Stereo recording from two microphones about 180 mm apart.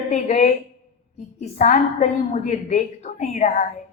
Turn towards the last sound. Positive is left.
turn(degrees=45)  # may be behind; listen again after turning